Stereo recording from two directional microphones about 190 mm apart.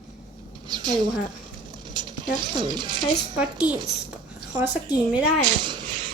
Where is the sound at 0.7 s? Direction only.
20° right (ahead or behind).